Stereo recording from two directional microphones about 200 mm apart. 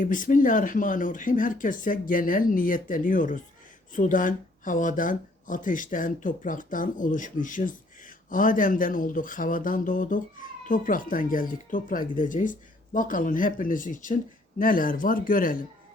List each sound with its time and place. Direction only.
0.0 s a man's voice: 40° left (ahead or behind)